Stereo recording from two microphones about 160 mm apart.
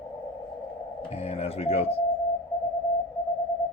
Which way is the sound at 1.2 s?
40° left (ahead or behind).